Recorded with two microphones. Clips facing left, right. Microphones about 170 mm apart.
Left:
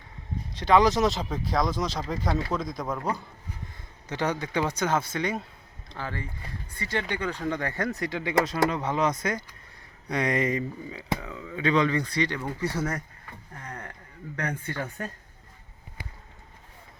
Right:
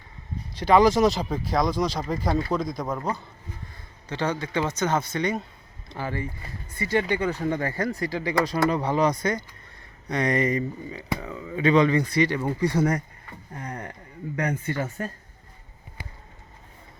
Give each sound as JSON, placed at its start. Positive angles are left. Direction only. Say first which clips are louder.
{"t": 0.5, "sound": "speech", "louder": "right 3 dB", "side_deg": 0}
{"t": 4.1, "sound": "a man's voice", "louder": "right 1 dB", "side_deg": 15}
{"t": 4.8, "sound": "speech", "louder": "right 2 dB", "side_deg": 5}
{"t": 5.9, "sound": "speech", "louder": "right 5 dB", "side_deg": -10}
{"t": 12.7, "sound": "speech", "louder": "right 9 dB", "side_deg": -30}
{"t": 13.5, "sound": "a sound", "louder": "right 6 dB", "side_deg": -15}
{"t": 14.3, "sound": "speech", "louder": "right 5 dB", "side_deg": -10}